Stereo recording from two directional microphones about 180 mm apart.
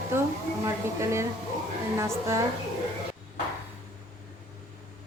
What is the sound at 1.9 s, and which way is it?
Speech, 15° right (ahead or behind).